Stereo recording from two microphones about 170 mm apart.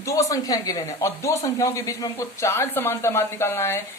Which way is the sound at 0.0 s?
20° left (ahead or behind).